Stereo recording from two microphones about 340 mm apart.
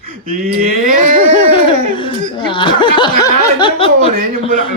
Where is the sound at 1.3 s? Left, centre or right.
Centre.